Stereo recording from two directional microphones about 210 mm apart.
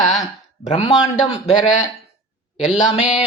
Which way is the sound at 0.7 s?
30° left (ahead or behind).